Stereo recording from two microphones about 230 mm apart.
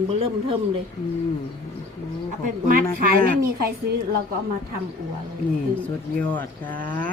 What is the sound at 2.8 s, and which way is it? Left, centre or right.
A woman's voice, right.